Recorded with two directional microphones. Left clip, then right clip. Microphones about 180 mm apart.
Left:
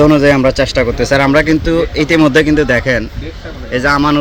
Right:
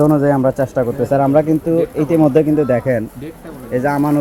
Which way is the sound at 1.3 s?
10° left (ahead or behind).